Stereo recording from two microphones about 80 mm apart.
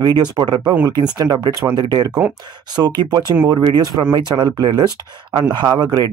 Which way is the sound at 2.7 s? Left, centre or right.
Right.